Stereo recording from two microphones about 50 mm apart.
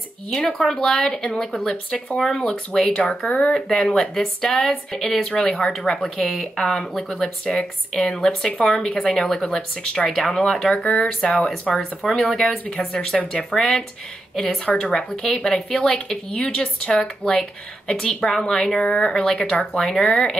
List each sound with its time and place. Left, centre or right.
0.3 s a woman's voice: centre
1.7 s speech: left
2.1 s a woman's voice: centre; by 3.5 s left
3.5 s a woman's voice: centre
5.3 s a woman's voice: centre
10.8 s speech: left
12.3 s speech: centre
12.6 s a woman's voice: centre
14.8 s a woman's voice: centre
19.3 s a woman's voice: left